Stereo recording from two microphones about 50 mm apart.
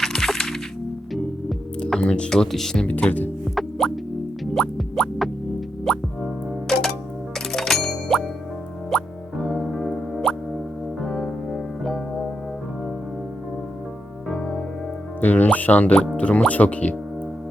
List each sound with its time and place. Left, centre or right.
0.0 s music: centre
2.0 s speech: left
2.3 s speech: centre
3.0 s speech: centre
3.5 s music: centre
11.0 s keyboard: centre
14.3 s music: centre
15.2 s music: left
16.1 s speech: left